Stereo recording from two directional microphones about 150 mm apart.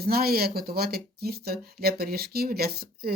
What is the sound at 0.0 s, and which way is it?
Speech, 90° right.